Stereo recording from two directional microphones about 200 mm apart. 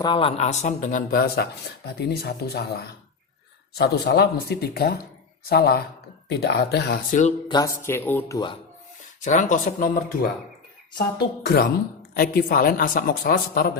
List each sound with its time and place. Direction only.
0.0 s speech: 25° left (ahead or behind); by 7.2 s 55° left (ahead or behind)
7.4 s speech: 20° left (ahead or behind)
9.2 s speech: 40° left (ahead or behind)
10.9 s speech: 50° left (ahead or behind)